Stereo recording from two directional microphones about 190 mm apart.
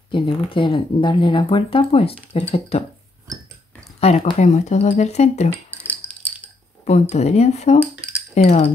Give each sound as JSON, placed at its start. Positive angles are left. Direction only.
{"t": 0.1, "sound": "speech", "side_deg": 25}
{"t": 4.0, "sound": "speech", "side_deg": 35}
{"t": 6.8, "sound": "speech", "side_deg": 35}